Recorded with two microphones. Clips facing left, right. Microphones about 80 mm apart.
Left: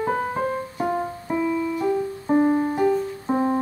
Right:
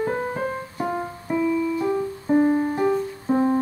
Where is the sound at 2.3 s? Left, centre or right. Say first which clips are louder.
Even; centre.